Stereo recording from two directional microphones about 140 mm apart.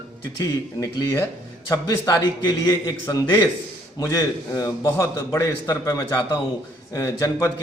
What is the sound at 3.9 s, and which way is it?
A man's voice, 25° left (ahead or behind).